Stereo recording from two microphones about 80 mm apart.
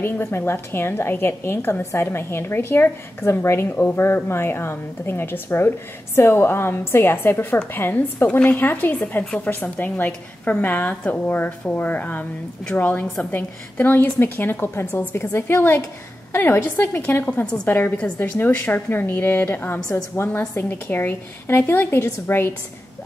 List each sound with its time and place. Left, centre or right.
0.0 s a woman's voice: left
17.2 s a woman's voice: centre